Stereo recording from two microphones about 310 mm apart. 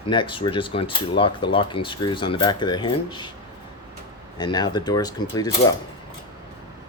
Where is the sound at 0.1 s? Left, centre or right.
Centre.